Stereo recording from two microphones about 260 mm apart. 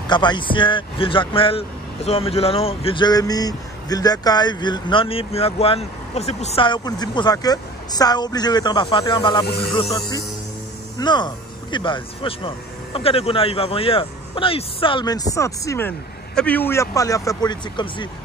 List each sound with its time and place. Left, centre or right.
0.1 s speech: centre